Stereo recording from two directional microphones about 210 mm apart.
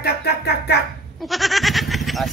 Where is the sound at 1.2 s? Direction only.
Centre (ahead or behind).